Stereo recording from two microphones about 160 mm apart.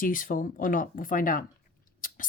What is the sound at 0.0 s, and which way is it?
Speech, 60° left (ahead or behind).